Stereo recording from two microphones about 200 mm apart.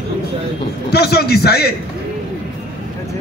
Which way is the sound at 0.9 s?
55° left (ahead or behind).